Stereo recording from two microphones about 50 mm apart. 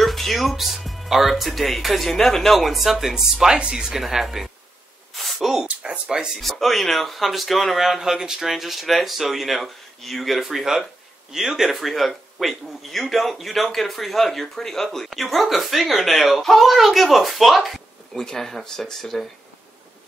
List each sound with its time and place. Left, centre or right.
0.0 s speech: centre
5.1 s gasp: centre
5.7 s a sound: centre
6.4 s speech: centre
18.1 s speech: centre